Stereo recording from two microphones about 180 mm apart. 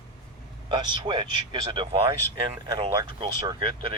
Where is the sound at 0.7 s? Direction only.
25° right (ahead or behind).